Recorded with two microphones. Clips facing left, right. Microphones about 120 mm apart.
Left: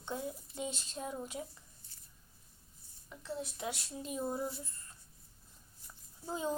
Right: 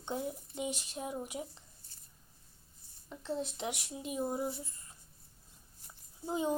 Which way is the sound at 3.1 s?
30° right (ahead or behind).